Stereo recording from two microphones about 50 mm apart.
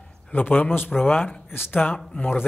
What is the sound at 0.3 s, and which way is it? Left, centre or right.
Speech, left.